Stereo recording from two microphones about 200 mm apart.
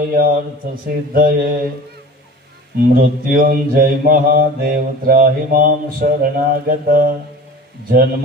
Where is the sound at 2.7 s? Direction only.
45° right (ahead or behind).